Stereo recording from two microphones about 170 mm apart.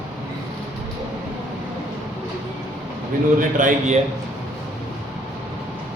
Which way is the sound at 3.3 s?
50° right (ahead or behind).